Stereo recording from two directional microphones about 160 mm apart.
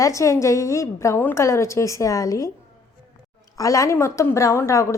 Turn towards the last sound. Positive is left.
turn(degrees=20)  # may be behind; listen again after turning